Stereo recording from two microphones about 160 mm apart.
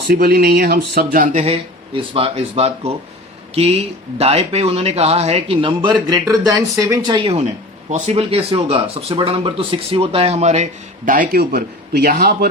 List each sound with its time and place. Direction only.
0.1 s speech: 70° right (ahead or behind)
1.4 s speech: 35° right (ahead or behind)
6.1 s speech: 20° right (ahead or behind); by 12.5 s 70° right (ahead or behind)